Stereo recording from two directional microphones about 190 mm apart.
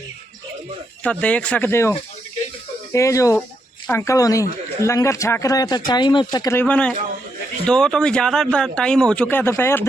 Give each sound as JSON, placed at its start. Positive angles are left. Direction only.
{"t": 1.0, "sound": "speech", "side_deg": 5}
{"t": 2.9, "sound": "speech", "side_deg": 15}